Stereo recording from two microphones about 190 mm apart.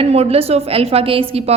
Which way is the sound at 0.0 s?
30° right (ahead or behind).